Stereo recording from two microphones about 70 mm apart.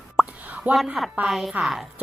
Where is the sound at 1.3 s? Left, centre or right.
Centre.